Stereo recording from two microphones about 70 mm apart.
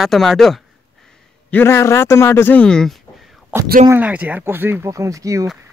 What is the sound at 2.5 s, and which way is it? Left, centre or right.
Speech, centre.